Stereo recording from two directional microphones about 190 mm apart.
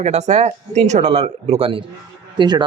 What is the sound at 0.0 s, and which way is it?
Speech, 35° right (ahead or behind).